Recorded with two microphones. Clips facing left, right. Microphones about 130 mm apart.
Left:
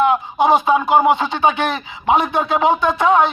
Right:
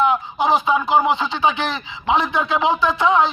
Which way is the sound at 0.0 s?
50° left (ahead or behind).